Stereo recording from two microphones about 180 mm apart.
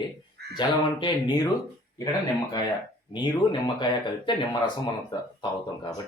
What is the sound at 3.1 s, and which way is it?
Speech, 25° left (ahead or behind).